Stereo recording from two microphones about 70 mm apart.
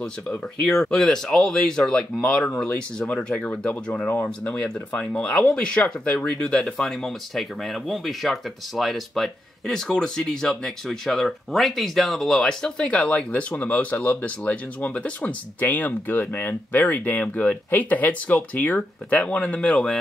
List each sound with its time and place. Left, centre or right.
0.0 s speech: centre